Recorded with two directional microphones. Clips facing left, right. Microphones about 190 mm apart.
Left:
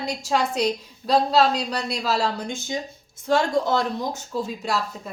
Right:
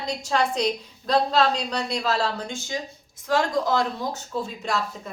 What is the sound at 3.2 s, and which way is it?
Speech, 25° left (ahead or behind).